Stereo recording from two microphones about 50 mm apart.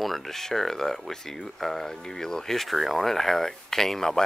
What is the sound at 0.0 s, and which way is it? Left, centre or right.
Speech, centre.